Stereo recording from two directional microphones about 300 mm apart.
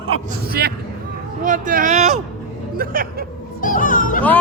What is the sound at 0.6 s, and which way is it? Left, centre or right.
Speech, right.